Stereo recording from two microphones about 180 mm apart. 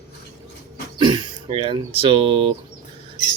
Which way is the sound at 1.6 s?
30° right (ahead or behind).